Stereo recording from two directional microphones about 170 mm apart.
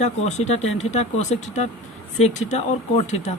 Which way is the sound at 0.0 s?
40° left (ahead or behind).